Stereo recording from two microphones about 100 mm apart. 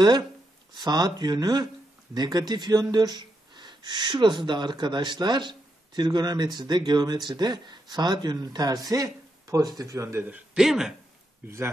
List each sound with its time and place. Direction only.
0.7 s speech: 45° right (ahead or behind); by 10.3 s 25° right (ahead or behind)
10.3 s speech: 5° right (ahead or behind)
11.4 s speech: 25° right (ahead or behind)